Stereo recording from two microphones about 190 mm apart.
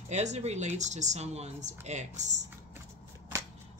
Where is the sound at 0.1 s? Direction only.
35° right (ahead or behind).